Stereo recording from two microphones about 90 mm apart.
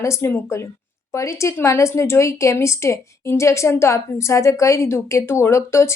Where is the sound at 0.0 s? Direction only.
30° left (ahead or behind).